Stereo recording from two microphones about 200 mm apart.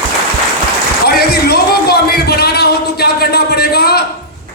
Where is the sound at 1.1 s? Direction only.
50° left (ahead or behind).